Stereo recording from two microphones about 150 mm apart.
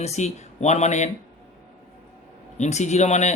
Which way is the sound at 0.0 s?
45° left (ahead or behind).